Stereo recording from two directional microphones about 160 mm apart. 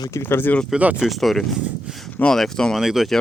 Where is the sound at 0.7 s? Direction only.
10° right (ahead or behind).